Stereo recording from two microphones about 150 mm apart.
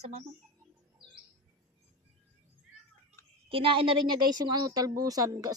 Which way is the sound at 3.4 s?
35° right (ahead or behind).